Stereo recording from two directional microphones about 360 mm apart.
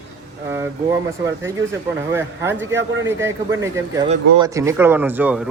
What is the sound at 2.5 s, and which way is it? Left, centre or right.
Speech, right.